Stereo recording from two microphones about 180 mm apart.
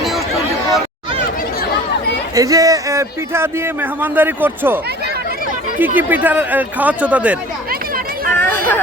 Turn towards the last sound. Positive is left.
turn(degrees=-5)  # may be behind; listen again after turning